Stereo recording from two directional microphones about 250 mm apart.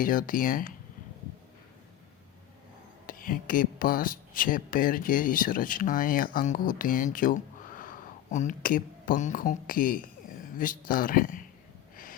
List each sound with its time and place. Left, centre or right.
0.0 s speech: left
3.1 s speech: left